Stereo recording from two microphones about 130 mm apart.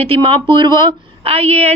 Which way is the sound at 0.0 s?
45° right (ahead or behind).